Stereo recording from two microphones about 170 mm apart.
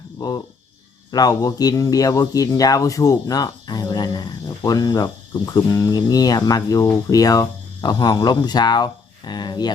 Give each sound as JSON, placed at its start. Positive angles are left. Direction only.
{"t": 0.2, "sound": "speech", "side_deg": 25}